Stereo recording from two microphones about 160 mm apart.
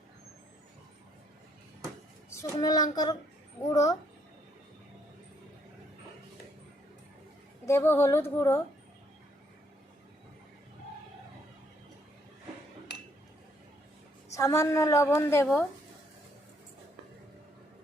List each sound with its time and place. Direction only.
2.4 s a woman's voice: 25° left (ahead or behind)
7.6 s speech: 15° left (ahead or behind)
14.3 s a woman's voice: 20° left (ahead or behind)